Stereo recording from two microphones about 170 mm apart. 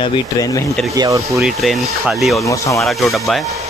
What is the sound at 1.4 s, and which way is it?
Speech, centre (ahead or behind).